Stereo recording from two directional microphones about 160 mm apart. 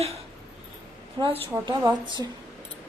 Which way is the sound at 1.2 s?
30° right (ahead or behind).